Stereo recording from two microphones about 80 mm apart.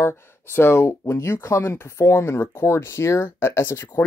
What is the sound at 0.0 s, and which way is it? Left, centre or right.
Speech, left.